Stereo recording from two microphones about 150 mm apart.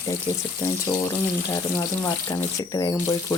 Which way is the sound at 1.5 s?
25° left (ahead or behind).